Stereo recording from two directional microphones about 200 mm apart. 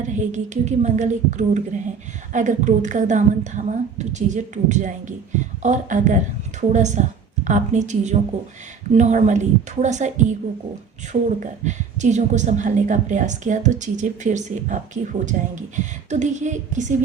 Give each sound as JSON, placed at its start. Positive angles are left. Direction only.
{"t": 0.0, "sound": "a woman's voice", "side_deg": -40}